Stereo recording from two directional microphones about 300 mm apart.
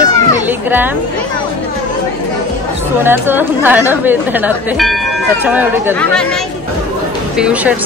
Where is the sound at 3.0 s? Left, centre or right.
Centre.